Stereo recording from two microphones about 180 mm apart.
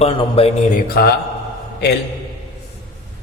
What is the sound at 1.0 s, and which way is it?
Speech, 55° left (ahead or behind).